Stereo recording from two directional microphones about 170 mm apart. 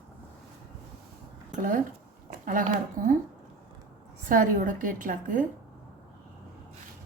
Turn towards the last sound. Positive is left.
turn(degrees=-50)  # may be behind; listen again after turning